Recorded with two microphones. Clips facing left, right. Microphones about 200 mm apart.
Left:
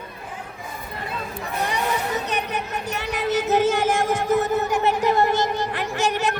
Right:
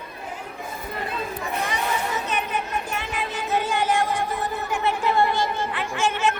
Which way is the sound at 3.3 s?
45° left (ahead or behind).